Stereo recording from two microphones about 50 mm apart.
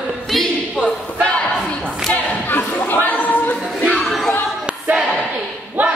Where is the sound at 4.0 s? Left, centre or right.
Centre.